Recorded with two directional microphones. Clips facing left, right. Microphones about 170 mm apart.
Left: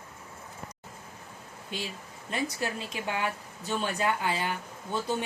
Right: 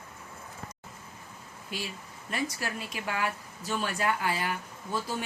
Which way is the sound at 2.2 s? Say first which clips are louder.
Left 2 dB; 25° left (ahead or behind).